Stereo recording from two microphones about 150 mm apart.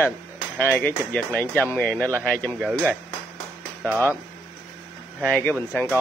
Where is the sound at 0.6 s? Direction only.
15° left (ahead or behind).